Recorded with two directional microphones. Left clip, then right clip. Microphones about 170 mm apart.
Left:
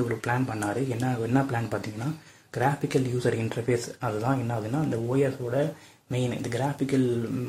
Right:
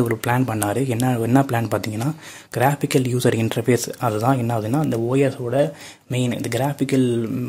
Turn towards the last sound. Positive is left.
turn(degrees=-45)  # may be behind; listen again after turning